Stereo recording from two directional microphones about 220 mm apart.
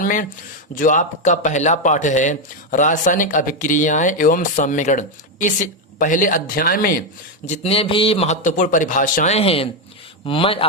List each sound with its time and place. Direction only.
0.0 s a man's voice: 35° left (ahead or behind)
7.4 s a man's voice: 30° left (ahead or behind)